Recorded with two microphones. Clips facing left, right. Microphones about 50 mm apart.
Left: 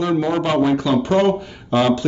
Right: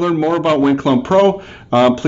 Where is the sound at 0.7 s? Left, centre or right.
Right.